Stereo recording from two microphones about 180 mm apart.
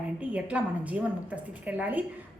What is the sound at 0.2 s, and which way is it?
A woman's voice, 5° right (ahead or behind).